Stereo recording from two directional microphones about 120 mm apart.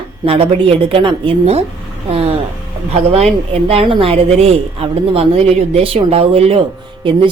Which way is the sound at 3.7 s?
50° right (ahead or behind).